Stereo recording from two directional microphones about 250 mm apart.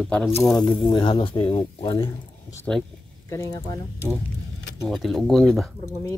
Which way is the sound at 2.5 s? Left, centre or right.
Centre.